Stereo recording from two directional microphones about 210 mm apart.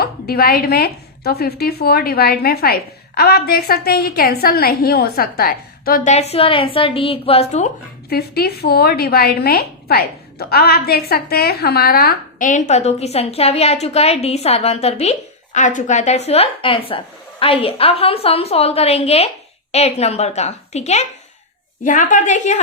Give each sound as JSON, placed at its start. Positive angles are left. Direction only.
{"t": 0.0, "sound": "speech", "side_deg": 45}
{"t": 6.1, "sound": "a woman's voice", "side_deg": 30}
{"t": 8.1, "sound": "a woman's voice", "side_deg": 50}